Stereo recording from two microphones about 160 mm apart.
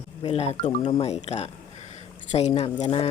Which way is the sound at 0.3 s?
45° left (ahead or behind).